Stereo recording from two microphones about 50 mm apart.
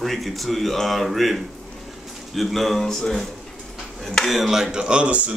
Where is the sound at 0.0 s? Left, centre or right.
Centre.